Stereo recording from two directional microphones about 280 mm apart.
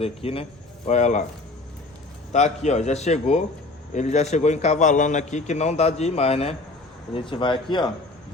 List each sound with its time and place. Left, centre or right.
0.0 s a man's voice: centre
2.3 s a man's voice: left